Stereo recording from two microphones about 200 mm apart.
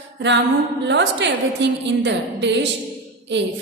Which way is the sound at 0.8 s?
60° right (ahead or behind).